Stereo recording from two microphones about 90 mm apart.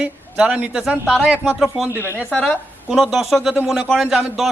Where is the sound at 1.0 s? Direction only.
5° left (ahead or behind).